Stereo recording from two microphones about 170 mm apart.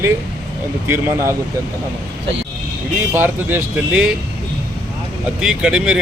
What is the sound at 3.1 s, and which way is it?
Speech, 10° right (ahead or behind).